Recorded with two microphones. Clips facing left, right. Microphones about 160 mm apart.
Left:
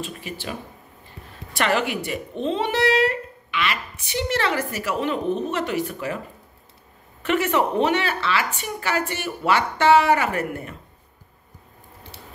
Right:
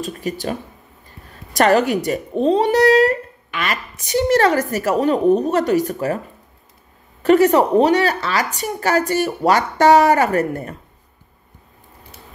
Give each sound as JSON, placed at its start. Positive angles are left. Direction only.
{"t": 0.0, "sound": "speech", "side_deg": -40}
{"t": 7.2, "sound": "speech", "side_deg": -40}